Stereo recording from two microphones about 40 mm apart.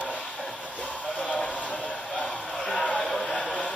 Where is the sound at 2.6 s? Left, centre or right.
Centre.